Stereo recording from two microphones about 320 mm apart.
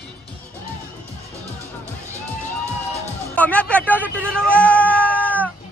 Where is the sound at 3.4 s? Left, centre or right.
Centre.